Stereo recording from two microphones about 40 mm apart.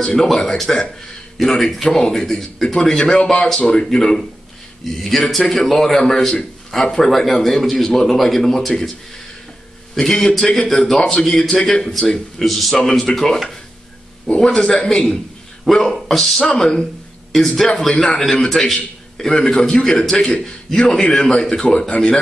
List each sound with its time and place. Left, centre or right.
0.1 s a man's voice: centre
4.8 s a man's voice: centre
9.9 s a man's voice: centre
11.0 s a man's voice: left
11.2 s a man's voice: centre
14.4 s a man's voice: left
15.6 s a man's voice: centre
16.4 s a man's voice: centre